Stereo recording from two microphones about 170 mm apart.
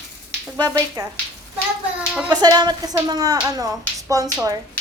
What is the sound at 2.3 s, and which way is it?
Speech, 25° right (ahead or behind).